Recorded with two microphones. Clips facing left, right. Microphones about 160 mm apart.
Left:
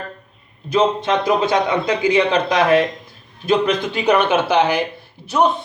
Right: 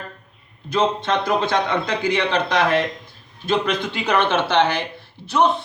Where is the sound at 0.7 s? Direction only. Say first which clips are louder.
Left 3 dB; 15° left (ahead or behind).